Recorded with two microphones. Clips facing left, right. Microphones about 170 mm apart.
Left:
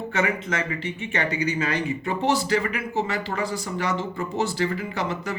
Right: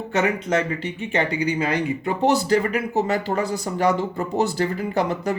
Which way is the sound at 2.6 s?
40° right (ahead or behind).